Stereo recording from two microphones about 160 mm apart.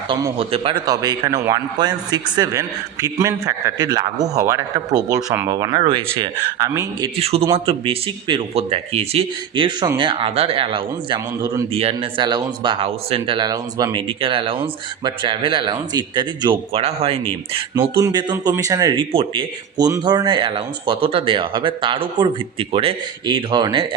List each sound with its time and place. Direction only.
0.1 s speech: 35° right (ahead or behind)
0.9 s a man's voice: 25° right (ahead or behind)
7.2 s speech: 40° right (ahead or behind)
17.7 s a man's voice: 25° right (ahead or behind)
19.1 s speech: 35° right (ahead or behind)